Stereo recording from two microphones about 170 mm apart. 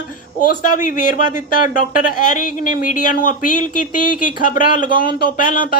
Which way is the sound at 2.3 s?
50° left (ahead or behind).